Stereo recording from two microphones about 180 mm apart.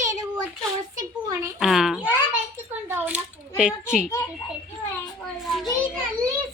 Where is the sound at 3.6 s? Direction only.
5° right (ahead or behind).